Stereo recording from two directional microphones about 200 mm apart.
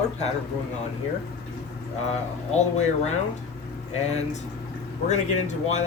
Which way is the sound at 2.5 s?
35° left (ahead or behind).